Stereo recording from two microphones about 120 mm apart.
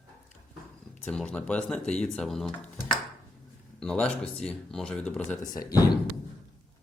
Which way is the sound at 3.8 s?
5° left (ahead or behind).